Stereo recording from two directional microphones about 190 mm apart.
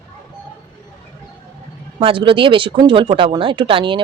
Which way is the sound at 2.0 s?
25° right (ahead or behind).